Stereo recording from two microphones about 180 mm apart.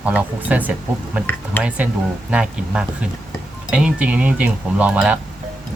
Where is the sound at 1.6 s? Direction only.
10° left (ahead or behind).